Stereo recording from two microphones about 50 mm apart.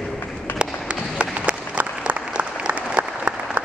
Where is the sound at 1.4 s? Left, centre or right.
Right.